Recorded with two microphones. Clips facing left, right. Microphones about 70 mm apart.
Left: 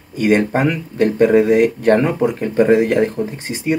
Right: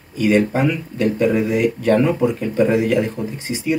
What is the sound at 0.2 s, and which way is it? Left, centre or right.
Speech, left.